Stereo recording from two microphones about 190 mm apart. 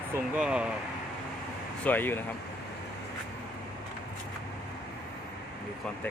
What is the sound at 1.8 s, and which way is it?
Speech, 10° left (ahead or behind).